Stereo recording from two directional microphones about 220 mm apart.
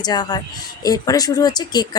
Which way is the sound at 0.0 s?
20° left (ahead or behind).